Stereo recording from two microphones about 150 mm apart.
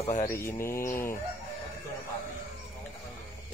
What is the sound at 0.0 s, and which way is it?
Mantra, 50° left (ahead or behind).